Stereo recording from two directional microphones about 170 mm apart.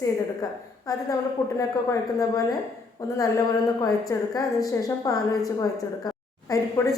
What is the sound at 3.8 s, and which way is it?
Speech, 20° left (ahead or behind).